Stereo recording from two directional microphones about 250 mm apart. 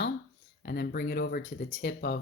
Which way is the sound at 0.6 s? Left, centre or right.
Left.